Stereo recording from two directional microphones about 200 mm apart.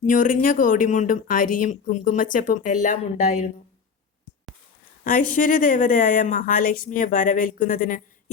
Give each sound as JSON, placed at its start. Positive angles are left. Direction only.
{"t": 0.0, "sound": "speech", "side_deg": 40}
{"t": 5.0, "sound": "speech", "side_deg": 40}